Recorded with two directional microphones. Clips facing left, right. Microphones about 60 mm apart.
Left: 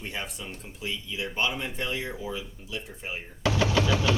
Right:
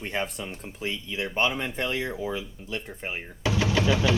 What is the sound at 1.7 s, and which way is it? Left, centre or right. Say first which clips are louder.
Speech: right 3 dB; right.